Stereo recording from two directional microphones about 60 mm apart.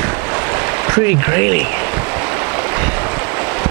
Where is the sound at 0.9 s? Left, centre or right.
Right.